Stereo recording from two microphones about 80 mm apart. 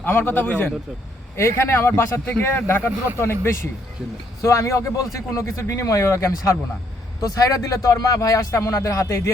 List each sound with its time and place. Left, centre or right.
0.0 s a man's voice: left
1.4 s a man's voice: left